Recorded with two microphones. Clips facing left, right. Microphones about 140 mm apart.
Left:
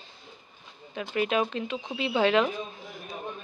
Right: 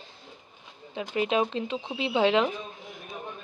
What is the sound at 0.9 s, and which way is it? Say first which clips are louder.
A woman's voice: right 1 dB; 20° right (ahead or behind).